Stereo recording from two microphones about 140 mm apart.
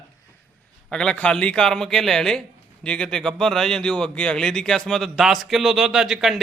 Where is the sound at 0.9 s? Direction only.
5° left (ahead or behind).